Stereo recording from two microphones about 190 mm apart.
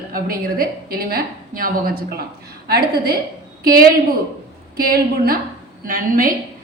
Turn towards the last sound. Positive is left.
turn(degrees=-45)  # may be behind; listen again after turning